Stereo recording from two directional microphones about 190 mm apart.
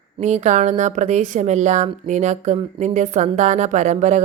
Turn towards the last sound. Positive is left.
turn(degrees=-40)  # may be behind; listen again after turning